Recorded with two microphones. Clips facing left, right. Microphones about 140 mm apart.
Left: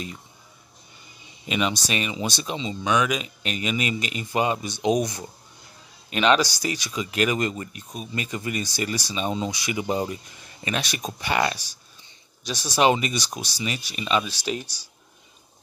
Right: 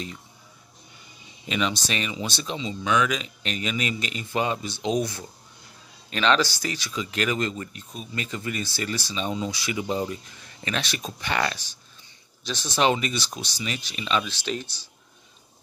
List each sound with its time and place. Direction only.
1.5 s speech: 10° left (ahead or behind)